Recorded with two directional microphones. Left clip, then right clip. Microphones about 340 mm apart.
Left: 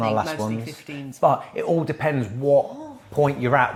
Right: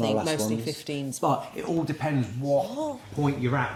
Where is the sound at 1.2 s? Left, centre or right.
Left.